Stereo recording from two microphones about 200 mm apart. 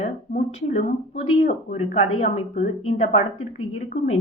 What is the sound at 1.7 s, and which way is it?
A woman's voice, 35° left (ahead or behind).